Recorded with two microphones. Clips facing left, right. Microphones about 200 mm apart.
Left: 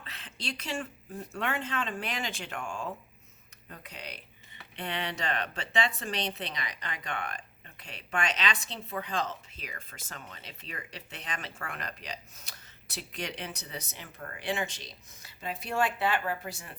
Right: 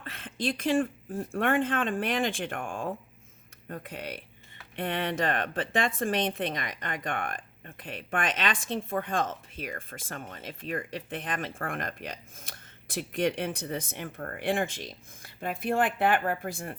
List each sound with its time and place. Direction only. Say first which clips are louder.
0.0 s speech: right 9 dB; 50° right (ahead or behind)